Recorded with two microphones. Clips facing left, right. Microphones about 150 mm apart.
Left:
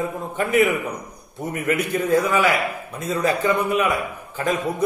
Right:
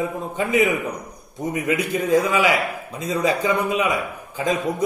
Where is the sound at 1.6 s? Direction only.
15° right (ahead or behind).